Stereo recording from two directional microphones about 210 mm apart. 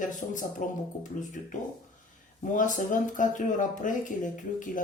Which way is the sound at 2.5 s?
40° left (ahead or behind).